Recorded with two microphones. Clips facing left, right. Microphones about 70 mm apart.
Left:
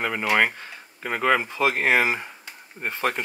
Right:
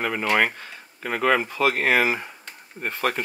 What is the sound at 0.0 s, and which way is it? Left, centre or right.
Speech, centre.